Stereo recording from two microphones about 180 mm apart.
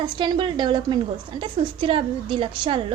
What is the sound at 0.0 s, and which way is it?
A woman's voice, 25° right (ahead or behind).